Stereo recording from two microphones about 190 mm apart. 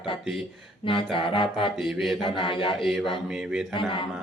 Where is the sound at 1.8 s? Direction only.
Centre (ahead or behind).